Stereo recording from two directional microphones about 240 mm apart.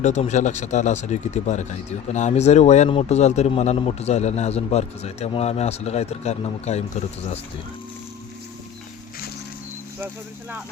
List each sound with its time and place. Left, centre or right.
0.0 s speech: left